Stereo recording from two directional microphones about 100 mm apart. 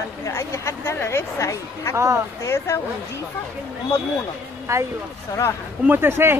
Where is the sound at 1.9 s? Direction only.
30° right (ahead or behind).